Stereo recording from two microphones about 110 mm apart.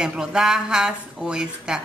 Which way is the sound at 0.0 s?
5° right (ahead or behind).